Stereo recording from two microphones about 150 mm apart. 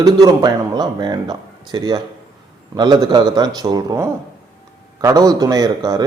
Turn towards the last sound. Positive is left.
turn(degrees=-25)  # may be behind; listen again after turning